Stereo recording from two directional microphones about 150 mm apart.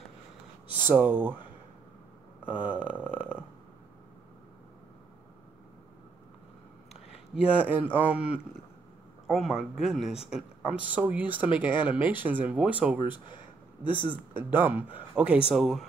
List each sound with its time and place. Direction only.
0.8 s speech: 10° right (ahead or behind)
2.4 s speech: 10° right (ahead or behind)
7.1 s speech: 5° right (ahead or behind)
13.3 s a sound: 35° left (ahead or behind)
14.3 s speech: 15° right (ahead or behind)